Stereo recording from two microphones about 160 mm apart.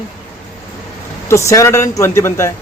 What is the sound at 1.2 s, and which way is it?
Speech, 20° left (ahead or behind).